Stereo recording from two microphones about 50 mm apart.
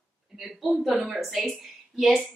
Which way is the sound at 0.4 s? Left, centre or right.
Centre.